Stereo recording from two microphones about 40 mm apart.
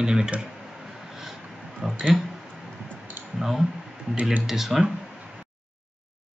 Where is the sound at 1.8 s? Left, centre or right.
Centre.